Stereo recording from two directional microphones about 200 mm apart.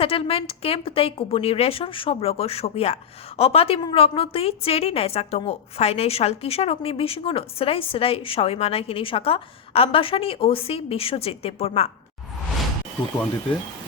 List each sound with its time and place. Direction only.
0.0 s speech: 30° left (ahead or behind)